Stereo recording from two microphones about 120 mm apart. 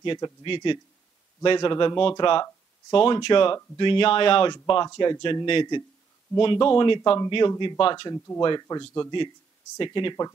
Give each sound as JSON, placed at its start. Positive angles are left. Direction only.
{"t": 0.0, "sound": "speech", "side_deg": 40}
{"t": 9.8, "sound": "speech", "side_deg": 40}